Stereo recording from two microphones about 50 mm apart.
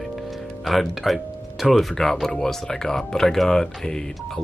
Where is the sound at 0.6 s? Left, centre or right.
Centre.